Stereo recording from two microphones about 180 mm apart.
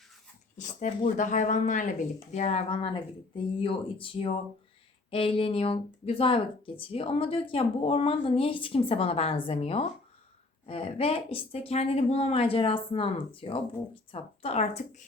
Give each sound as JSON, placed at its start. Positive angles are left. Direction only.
{"t": 0.5, "sound": "speech", "side_deg": 45}